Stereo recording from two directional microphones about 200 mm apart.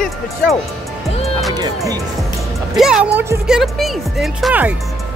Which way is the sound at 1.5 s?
20° right (ahead or behind).